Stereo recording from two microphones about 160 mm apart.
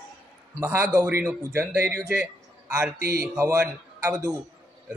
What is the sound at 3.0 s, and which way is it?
Speech, 70° right (ahead or behind).